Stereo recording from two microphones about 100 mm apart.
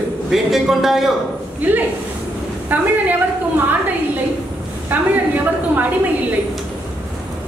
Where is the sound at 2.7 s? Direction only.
20° right (ahead or behind).